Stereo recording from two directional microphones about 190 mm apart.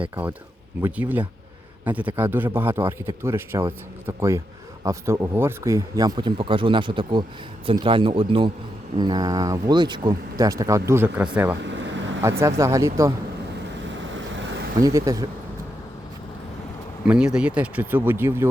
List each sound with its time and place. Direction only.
0.9 s speech: 10° right (ahead or behind)
11.6 s vehicle: 70° right (ahead or behind)
12.4 s speech: 15° right (ahead or behind)
13.8 s vehicle: 75° right (ahead or behind)
14.8 s speech: 15° right (ahead or behind)
17.1 s speech: 5° right (ahead or behind)